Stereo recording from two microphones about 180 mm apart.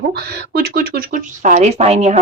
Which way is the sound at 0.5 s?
55° right (ahead or behind).